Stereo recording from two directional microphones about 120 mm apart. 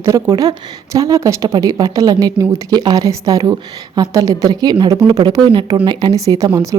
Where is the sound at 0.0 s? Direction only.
25° right (ahead or behind).